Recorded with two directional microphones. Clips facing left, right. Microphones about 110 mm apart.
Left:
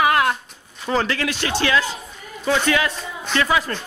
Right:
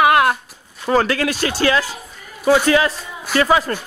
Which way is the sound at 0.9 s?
50° right (ahead or behind).